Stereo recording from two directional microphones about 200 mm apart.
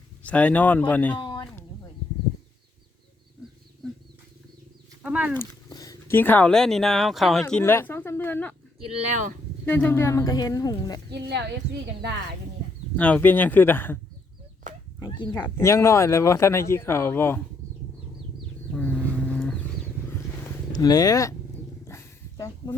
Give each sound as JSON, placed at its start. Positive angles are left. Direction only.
{"t": 0.2, "sound": "speech", "side_deg": 5}
{"t": 1.2, "sound": "a sound", "side_deg": 20}
{"t": 5.0, "sound": "wild animals", "side_deg": -5}
{"t": 5.3, "sound": "speech", "side_deg": 15}
{"t": 7.4, "sound": "speech", "side_deg": 10}
{"t": 8.8, "sound": "speech", "side_deg": -35}
{"t": 9.6, "sound": "speech", "side_deg": 10}
{"t": 11.1, "sound": "speech", "side_deg": -60}
{"t": 13.0, "sound": "speech", "side_deg": 5}
{"t": 18.7, "sound": "a sound", "side_deg": 5}
{"t": 20.7, "sound": "speech", "side_deg": 20}
{"t": 21.8, "sound": "a sound", "side_deg": 15}